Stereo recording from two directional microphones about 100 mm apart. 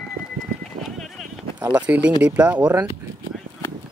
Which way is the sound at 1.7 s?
10° right (ahead or behind).